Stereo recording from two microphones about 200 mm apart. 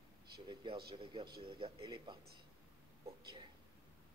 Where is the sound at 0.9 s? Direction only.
25° right (ahead or behind).